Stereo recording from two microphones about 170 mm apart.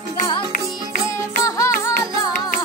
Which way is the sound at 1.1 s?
20° left (ahead or behind).